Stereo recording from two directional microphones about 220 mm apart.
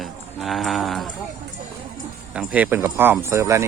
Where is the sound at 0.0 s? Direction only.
Centre (ahead or behind).